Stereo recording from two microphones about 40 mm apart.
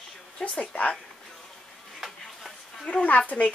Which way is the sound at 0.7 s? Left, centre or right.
Left.